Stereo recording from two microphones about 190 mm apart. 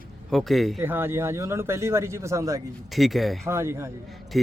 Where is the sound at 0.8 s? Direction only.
10° right (ahead or behind).